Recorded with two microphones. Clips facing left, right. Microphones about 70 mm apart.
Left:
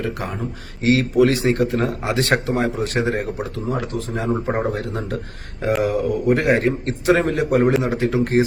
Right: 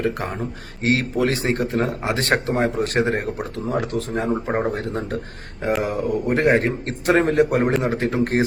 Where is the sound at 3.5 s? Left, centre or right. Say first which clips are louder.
Right 3 dB; right.